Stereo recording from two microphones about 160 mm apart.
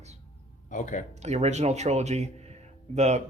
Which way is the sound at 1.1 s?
45° right (ahead or behind).